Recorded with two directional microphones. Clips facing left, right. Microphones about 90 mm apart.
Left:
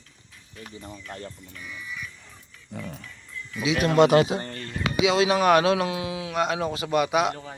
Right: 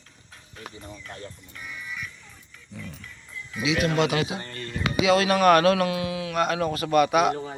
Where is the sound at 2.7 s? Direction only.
55° left (ahead or behind).